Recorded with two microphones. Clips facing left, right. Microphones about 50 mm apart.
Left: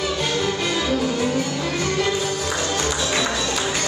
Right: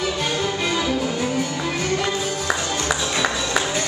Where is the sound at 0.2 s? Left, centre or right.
Centre.